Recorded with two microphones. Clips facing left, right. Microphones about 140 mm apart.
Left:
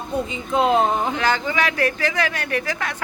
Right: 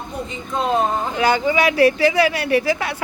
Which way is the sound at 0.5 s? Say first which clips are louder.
Left 3 dB; 20° left (ahead or behind).